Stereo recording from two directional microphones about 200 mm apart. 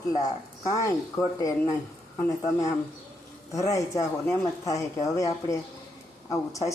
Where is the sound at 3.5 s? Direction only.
15° left (ahead or behind).